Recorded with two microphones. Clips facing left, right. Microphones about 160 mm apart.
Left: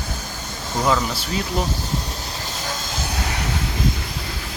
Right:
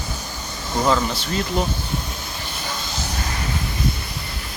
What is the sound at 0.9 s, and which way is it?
Speech, 5° left (ahead or behind).